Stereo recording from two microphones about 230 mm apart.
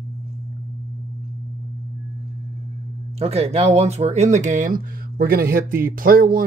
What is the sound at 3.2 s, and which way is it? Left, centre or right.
Speech, right.